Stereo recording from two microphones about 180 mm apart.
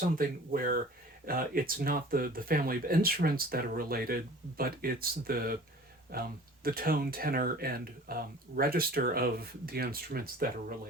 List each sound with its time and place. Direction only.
0.2 s speech: 50° right (ahead or behind)